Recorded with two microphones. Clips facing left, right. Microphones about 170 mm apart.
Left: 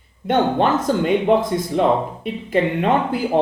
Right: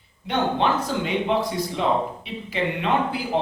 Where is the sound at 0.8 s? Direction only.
50° left (ahead or behind).